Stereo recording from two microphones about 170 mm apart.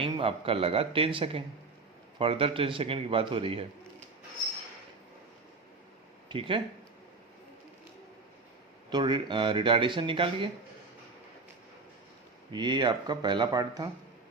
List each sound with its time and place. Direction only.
0.0 s a man's voice: 30° right (ahead or behind)
6.2 s speech: 30° right (ahead or behind)
8.9 s speech: 25° right (ahead or behind)
12.5 s speech: 25° right (ahead or behind)